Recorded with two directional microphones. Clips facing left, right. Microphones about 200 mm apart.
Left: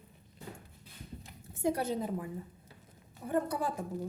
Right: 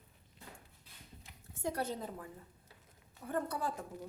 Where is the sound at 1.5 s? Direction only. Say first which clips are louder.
Left 6 dB; 10° left (ahead or behind).